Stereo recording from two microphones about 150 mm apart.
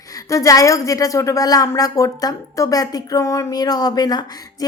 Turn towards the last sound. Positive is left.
turn(degrees=25)  # may be behind; listen again after turning